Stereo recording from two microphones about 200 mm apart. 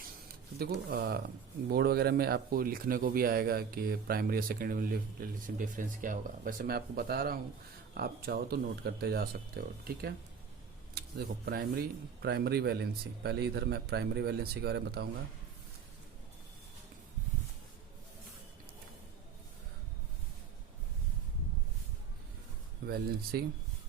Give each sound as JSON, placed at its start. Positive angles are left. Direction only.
{"t": 0.6, "sound": "speech", "side_deg": -50}
{"t": 11.4, "sound": "speech", "side_deg": -50}
{"t": 22.9, "sound": "speech", "side_deg": -50}